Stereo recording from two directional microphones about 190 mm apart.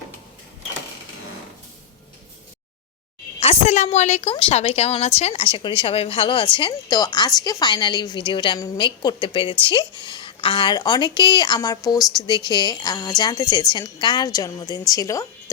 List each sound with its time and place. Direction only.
3.4 s a woman's voice: 30° left (ahead or behind); by 15.3 s 15° left (ahead or behind)